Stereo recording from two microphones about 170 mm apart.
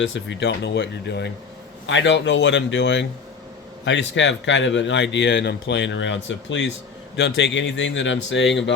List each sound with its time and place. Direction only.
0.0 s a man's voice: 90° left